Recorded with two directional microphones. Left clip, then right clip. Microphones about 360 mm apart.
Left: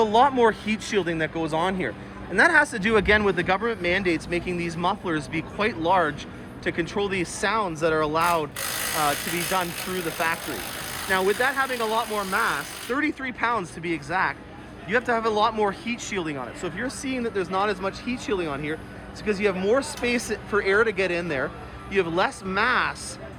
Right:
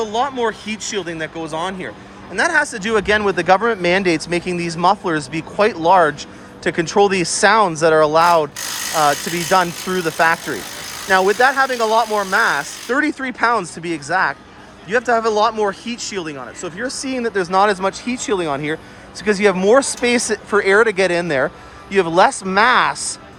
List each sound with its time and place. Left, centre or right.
0.0 s speech: centre
11.1 s speech: centre